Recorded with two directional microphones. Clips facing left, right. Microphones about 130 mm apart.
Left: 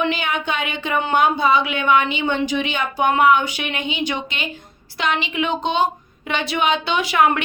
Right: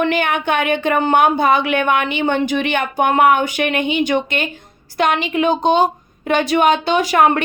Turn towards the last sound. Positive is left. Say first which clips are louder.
# right 4 dB
turn(degrees=-40)  # may be behind; listen again after turning